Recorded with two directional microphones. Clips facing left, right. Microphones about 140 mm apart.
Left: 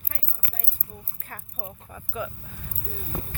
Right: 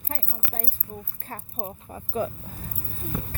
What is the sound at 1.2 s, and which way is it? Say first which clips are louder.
Speech: right 4 dB; 35° right (ahead or behind).